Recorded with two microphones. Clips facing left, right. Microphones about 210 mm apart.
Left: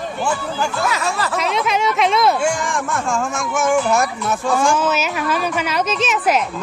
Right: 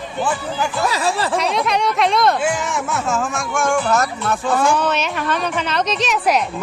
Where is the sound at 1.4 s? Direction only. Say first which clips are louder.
Even; centre (ahead or behind).